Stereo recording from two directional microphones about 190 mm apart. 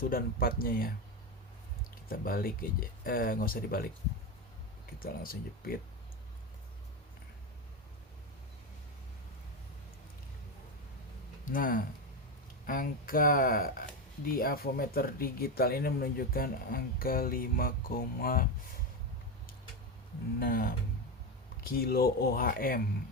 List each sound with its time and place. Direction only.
0.0 s speech: 50° left (ahead or behind)
2.0 s speech: 50° left (ahead or behind)
4.9 s speech: 50° left (ahead or behind)
11.4 s speech: 45° left (ahead or behind)
20.4 s speech: 50° left (ahead or behind)